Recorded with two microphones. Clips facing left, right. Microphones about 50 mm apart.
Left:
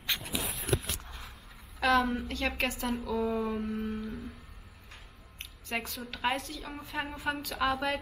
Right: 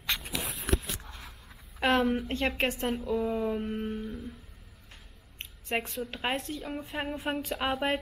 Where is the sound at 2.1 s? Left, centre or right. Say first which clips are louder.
Right 3 dB; right.